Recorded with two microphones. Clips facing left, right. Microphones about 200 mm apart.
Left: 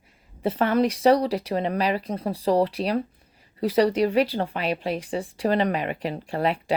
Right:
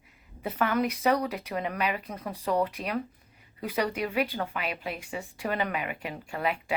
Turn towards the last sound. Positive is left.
turn(degrees=35)  # may be behind; listen again after turning